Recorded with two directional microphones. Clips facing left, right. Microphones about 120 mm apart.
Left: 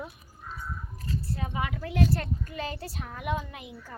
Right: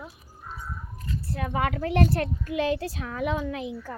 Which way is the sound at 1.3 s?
65° right (ahead or behind).